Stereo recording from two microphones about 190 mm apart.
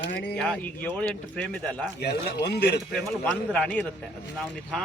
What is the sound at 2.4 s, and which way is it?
Speech, 60° left (ahead or behind).